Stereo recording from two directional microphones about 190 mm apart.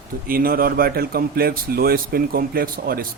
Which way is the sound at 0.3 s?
50° right (ahead or behind).